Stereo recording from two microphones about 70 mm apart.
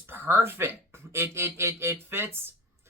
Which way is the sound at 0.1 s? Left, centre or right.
Right.